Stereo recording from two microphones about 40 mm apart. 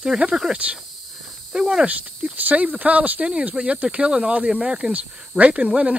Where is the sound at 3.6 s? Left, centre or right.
Right.